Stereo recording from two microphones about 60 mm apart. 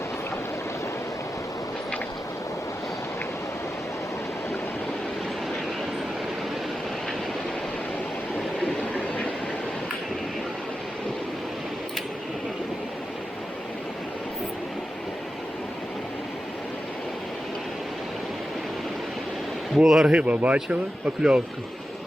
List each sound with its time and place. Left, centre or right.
19.8 s speech: centre
20.1 s speech: right